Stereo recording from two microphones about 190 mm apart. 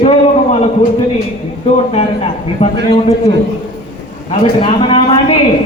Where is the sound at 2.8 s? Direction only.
20° left (ahead or behind).